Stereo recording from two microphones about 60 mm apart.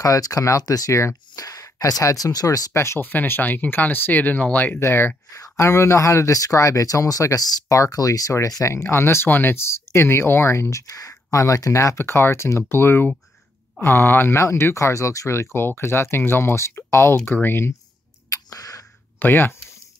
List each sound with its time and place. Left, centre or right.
0.0 s speech: left
1.3 s speech: left
2.7 s speech: left
3.0 s speech: left
4.7 s speech: left
5.3 s speech: left
8.8 s speech: left
12.0 s speech: left
14.4 s speech: left
15.5 s speech: left
18.3 s a sound: left
19.1 s speech: left